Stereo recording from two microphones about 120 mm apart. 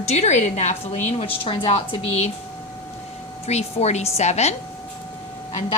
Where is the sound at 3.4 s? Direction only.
60° left (ahead or behind).